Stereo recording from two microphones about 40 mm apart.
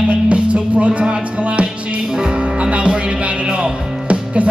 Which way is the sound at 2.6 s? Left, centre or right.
Right.